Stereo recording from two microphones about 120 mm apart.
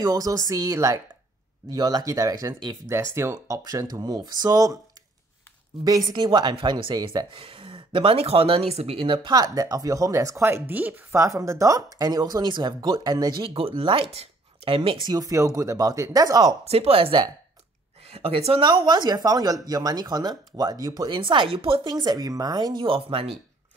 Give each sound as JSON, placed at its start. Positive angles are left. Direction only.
{"t": 0.0, "sound": "a woman's voice", "side_deg": -30}
{"t": 5.9, "sound": "speech", "side_deg": -35}
{"t": 7.2, "sound": "speech", "side_deg": -50}
{"t": 11.1, "sound": "speech", "side_deg": -25}
{"t": 16.6, "sound": "speech", "side_deg": -55}